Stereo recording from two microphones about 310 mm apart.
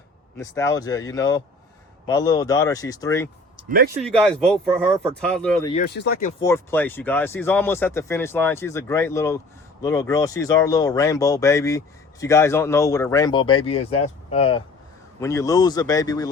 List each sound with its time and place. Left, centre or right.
0.3 s speech: centre
3.7 s speech: right
4.0 s speech: centre
5.8 s speech: left
6.4 s speech: centre